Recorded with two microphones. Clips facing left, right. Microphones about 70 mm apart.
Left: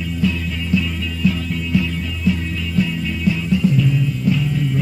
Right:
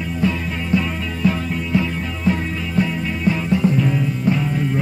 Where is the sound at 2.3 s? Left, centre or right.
Right.